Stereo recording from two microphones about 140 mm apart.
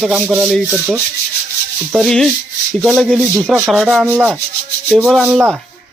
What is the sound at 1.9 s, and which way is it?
Speech, centre (ahead or behind).